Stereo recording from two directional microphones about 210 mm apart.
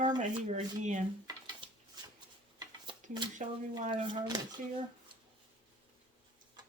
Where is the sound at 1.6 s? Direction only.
25° right (ahead or behind).